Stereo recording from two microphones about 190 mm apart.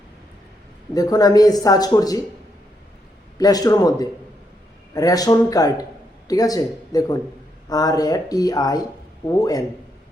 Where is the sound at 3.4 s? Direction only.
20° left (ahead or behind).